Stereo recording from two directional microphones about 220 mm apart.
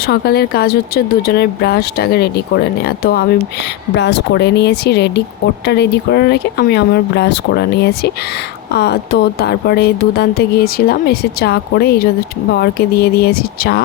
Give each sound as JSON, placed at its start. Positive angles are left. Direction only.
{"t": 0.0, "sound": "speech", "side_deg": 45}